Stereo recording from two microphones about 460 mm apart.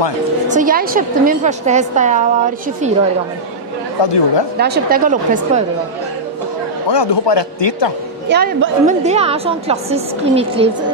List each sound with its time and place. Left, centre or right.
0.5 s a woman's voice: centre
4.0 s a man's voice: left
4.6 s speech: centre
6.9 s a man's voice: left
8.3 s a woman's voice: right